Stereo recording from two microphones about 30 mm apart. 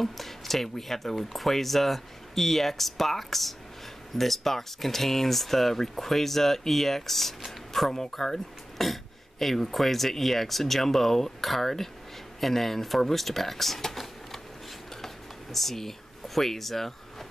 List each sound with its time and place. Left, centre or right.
0.0 s speech: centre
7.7 s a sound: centre
8.2 s speech: centre
8.8 s speech: centre
15.5 s speech: centre